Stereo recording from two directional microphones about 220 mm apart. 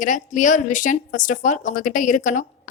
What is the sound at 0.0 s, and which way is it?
Speech, 35° left (ahead or behind).